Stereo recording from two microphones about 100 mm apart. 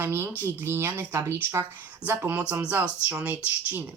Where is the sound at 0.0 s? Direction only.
25° right (ahead or behind).